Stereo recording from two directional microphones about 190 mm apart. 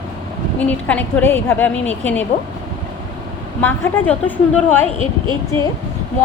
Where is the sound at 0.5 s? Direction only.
10° left (ahead or behind).